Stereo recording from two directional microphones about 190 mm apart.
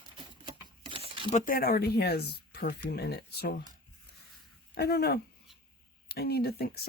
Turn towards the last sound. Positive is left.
turn(degrees=55)  # may be behind; listen again after turning